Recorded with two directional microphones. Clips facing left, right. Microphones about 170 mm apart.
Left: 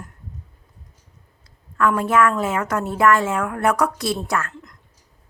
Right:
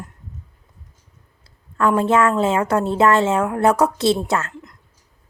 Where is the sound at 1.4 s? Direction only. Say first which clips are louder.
Right 1 dB; 30° right (ahead or behind).